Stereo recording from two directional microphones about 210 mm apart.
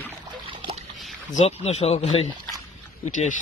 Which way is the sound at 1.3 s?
30° left (ahead or behind).